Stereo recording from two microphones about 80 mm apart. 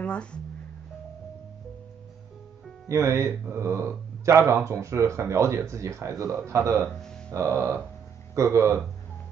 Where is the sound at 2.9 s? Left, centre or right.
Right.